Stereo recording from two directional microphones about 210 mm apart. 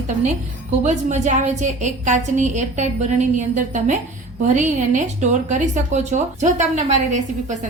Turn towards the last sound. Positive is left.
turn(degrees=-35)  # may be behind; listen again after turning